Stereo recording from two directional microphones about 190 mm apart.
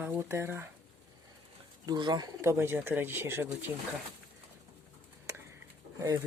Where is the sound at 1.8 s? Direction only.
20° right (ahead or behind).